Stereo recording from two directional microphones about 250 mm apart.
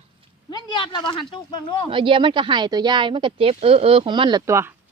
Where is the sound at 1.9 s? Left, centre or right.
Centre.